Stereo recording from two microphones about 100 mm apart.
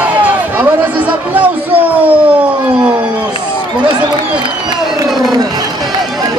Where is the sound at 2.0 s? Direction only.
15° right (ahead or behind).